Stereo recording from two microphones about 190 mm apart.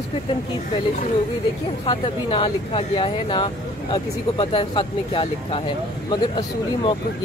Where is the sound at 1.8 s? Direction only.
25° left (ahead or behind).